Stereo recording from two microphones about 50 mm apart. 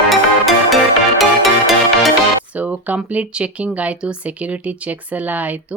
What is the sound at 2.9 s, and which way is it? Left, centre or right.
Speech, right.